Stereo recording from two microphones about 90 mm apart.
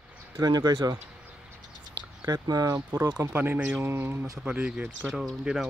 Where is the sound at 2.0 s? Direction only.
45° right (ahead or behind).